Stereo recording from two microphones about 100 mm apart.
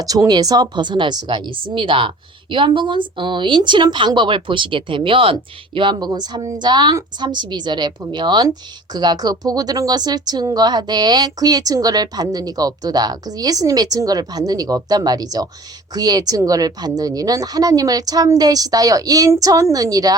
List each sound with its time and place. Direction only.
0.0 s speech: 40° right (ahead or behind)